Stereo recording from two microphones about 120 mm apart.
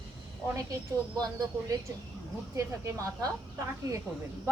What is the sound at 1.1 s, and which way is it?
A woman's voice, 30° right (ahead or behind).